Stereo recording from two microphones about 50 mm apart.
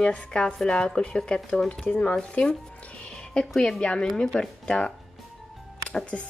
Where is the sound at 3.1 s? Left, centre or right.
Centre.